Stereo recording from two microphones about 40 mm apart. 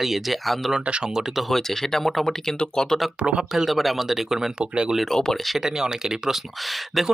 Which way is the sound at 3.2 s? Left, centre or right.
Right.